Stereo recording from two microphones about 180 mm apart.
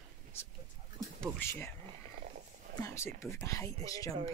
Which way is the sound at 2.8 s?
15° left (ahead or behind).